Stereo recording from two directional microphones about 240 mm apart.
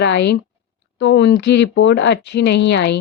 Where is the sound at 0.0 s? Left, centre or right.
Left.